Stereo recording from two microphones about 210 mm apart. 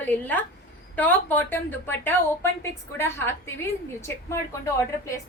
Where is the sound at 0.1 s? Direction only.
10° left (ahead or behind).